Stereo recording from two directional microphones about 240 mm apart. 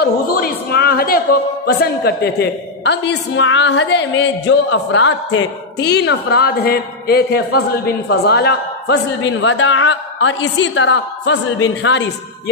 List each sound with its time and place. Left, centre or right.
0.0 s a man's voice: left